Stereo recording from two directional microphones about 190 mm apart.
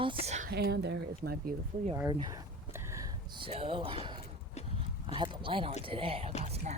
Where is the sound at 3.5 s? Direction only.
30° right (ahead or behind).